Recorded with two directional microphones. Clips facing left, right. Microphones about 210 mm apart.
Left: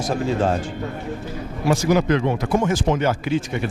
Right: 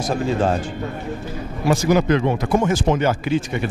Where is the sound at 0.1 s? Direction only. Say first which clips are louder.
Right 1 dB; 20° right (ahead or behind).